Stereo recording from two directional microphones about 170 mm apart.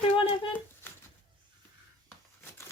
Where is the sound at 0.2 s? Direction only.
30° left (ahead or behind).